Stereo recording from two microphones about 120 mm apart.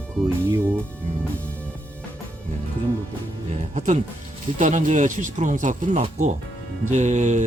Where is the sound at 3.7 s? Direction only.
75° right (ahead or behind).